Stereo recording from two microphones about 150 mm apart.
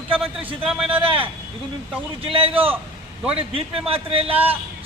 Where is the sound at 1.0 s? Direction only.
35° right (ahead or behind).